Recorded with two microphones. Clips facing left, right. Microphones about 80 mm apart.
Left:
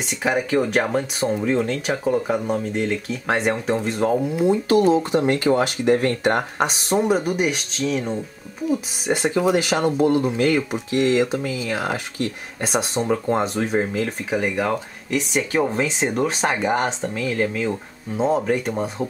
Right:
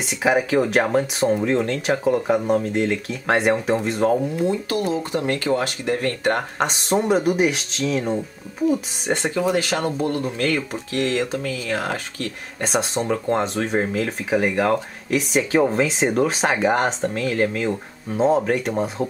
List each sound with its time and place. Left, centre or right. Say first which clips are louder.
0.0 s speech: right 3 dB; centre
4.2 s speech: left 2 dB; centre
6.9 s speech: right 2 dB; centre